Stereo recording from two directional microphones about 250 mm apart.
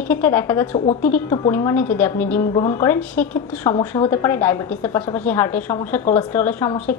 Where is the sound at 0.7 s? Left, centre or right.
Left.